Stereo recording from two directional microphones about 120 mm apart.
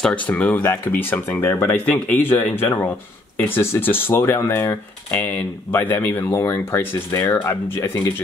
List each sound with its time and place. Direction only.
0.0 s speech: 10° left (ahead or behind)